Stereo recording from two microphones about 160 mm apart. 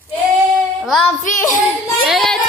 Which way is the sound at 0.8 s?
Centre (ahead or behind).